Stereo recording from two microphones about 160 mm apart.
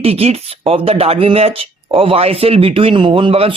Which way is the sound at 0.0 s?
40° right (ahead or behind).